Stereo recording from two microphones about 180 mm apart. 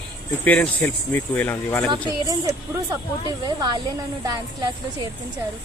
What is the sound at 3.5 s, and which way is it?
Speech, 25° right (ahead or behind).